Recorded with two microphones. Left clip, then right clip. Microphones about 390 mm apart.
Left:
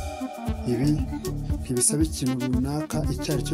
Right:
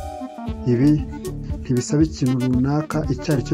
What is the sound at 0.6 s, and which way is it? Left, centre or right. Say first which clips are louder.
Speech: right 8 dB; left.